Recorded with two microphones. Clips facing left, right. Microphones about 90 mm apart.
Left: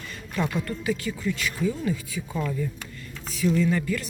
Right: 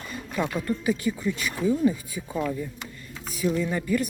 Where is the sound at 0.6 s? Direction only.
20° right (ahead or behind).